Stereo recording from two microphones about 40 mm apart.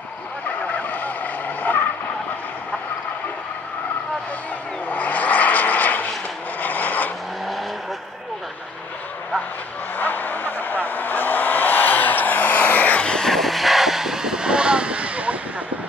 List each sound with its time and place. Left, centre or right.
0.5 s vehicle: left
4.8 s vehicle: left
6.6 s rub: left
9.9 s vehicle: left
13.0 s vehicle: left
13.3 s vehicle: centre; by 15.3 s right